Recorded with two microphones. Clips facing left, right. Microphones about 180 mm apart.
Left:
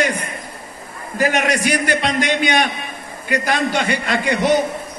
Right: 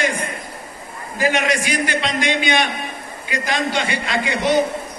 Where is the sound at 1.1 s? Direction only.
45° left (ahead or behind).